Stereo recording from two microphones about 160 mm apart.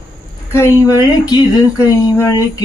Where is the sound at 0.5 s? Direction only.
20° left (ahead or behind).